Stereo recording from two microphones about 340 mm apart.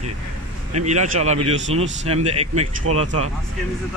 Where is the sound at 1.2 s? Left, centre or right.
Centre.